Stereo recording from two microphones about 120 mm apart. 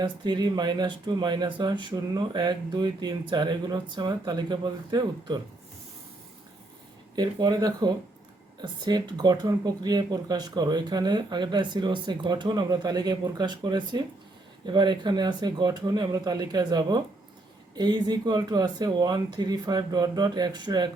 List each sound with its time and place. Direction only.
0.0 s speech: 35° right (ahead or behind)
7.2 s speech: 35° right (ahead or behind)